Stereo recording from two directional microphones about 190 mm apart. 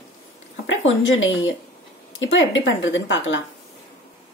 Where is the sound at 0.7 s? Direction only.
90° left.